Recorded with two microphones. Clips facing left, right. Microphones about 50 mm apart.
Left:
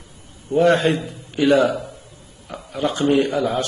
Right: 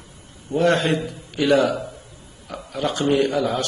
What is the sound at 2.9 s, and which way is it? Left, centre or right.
Speech, left.